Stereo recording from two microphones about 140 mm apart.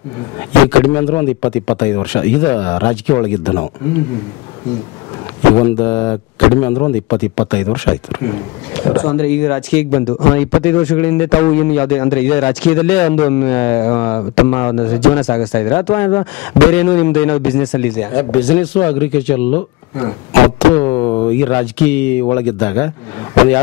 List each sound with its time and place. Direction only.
0.7 s speech: 15° left (ahead or behind)
5.6 s speech: 20° left (ahead or behind)